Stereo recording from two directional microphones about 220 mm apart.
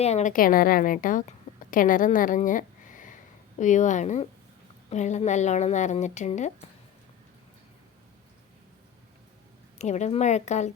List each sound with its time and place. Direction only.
0.0 s a woman's voice: 30° left (ahead or behind)
9.7 s a woman's voice: 30° left (ahead or behind)